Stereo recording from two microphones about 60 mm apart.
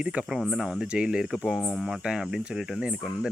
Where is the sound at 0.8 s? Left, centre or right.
Centre.